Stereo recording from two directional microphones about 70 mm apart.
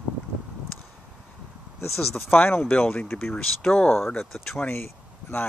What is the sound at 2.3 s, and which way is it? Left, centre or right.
Speech, left.